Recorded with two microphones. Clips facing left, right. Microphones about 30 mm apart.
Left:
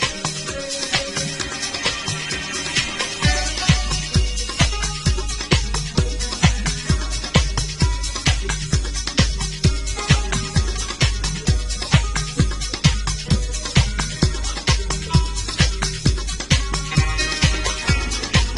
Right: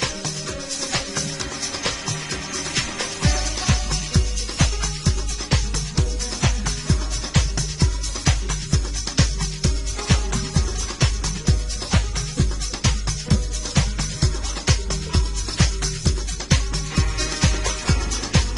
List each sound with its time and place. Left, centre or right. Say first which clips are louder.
0.9 s music: left 4 dB; left
9.6 s music: left 4 dB; left
10.0 s music: left 3 dB; left
12.8 s music: left 4 dB; left